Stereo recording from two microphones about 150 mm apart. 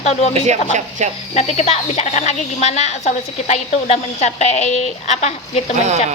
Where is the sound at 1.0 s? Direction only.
50° right (ahead or behind).